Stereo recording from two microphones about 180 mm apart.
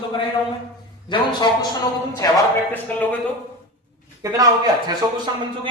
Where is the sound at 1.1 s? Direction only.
25° left (ahead or behind); by 3.1 s 10° left (ahead or behind).